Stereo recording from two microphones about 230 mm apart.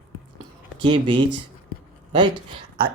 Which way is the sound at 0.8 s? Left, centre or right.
Right.